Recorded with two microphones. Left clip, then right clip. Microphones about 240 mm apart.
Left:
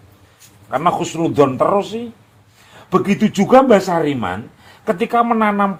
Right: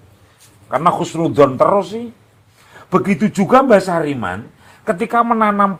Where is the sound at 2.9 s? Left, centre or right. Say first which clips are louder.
Even; centre.